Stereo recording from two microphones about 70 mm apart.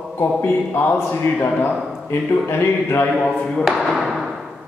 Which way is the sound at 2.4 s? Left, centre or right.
Left.